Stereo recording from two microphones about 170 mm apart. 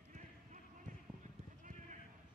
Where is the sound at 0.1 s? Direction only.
45° right (ahead or behind).